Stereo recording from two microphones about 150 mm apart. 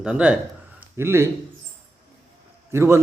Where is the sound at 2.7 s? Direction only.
15° right (ahead or behind).